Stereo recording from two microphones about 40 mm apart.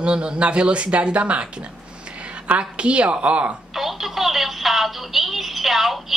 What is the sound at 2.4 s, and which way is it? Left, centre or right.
Speech, right.